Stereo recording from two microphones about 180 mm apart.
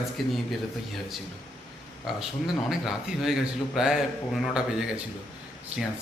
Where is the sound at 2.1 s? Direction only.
Centre (ahead or behind).